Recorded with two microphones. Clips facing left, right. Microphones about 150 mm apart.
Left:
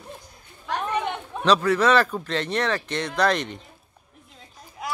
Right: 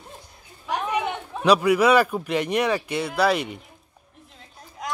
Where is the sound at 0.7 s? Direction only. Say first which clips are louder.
Right 1 dB; 10° right (ahead or behind).